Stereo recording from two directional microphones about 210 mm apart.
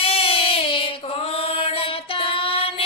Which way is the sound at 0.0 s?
25° left (ahead or behind).